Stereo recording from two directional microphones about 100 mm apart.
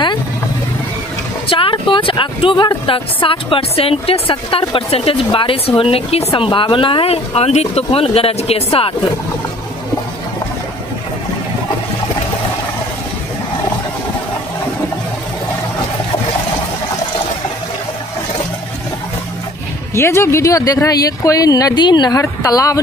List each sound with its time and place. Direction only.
1.5 s speech: 60° left (ahead or behind)
19.9 s speech: 25° left (ahead or behind)